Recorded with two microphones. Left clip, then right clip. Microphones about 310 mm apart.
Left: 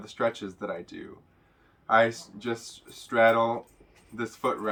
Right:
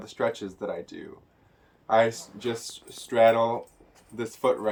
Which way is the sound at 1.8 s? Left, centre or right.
Left.